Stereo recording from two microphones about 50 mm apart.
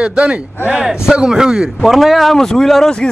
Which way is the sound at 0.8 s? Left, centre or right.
Centre.